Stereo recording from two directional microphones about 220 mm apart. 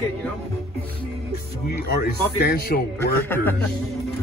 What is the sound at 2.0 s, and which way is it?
Speech, 45° left (ahead or behind).